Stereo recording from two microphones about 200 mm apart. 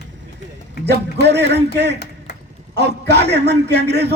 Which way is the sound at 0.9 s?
55° right (ahead or behind).